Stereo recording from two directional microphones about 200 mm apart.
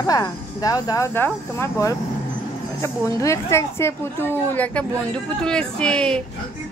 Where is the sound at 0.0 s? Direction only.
15° left (ahead or behind).